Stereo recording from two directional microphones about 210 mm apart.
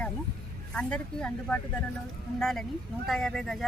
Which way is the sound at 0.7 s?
5° left (ahead or behind).